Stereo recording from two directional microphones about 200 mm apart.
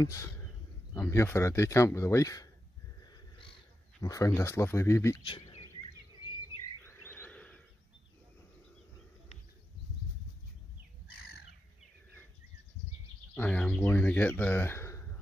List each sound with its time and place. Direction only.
0.0 s speech: 15° left (ahead or behind)
3.0 s crow: 25° left (ahead or behind)
4.0 s speech: 15° left (ahead or behind)
6.8 s a sound: 10° left (ahead or behind)
11.1 s bird: 50° left (ahead or behind)
13.3 s speech: 10° left (ahead or behind)